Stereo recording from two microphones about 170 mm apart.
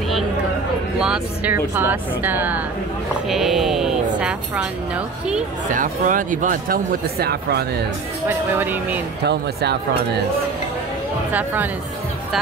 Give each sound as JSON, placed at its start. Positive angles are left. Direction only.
{"t": 0.9, "sound": "speech", "side_deg": -5}
{"t": 5.7, "sound": "speech", "side_deg": -50}
{"t": 8.3, "sound": "speech", "side_deg": -10}
{"t": 9.2, "sound": "speech", "side_deg": -75}
{"t": 11.3, "sound": "speech", "side_deg": -10}